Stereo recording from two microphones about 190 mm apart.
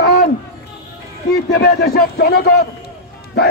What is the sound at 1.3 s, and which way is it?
A man's voice, 60° left (ahead or behind).